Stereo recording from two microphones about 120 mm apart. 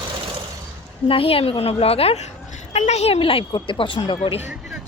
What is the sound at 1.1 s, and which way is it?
A woman's voice, 50° left (ahead or behind).